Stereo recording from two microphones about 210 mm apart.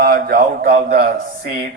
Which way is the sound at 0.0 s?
45° right (ahead or behind).